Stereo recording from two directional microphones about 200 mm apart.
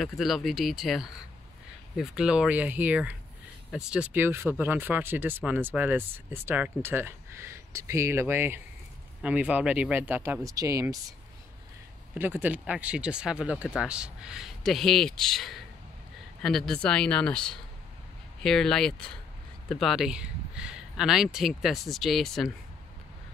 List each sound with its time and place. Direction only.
0.0 s speech: centre (ahead or behind); by 11.1 s 15° right (ahead or behind)
12.2 s speech: 10° right (ahead or behind)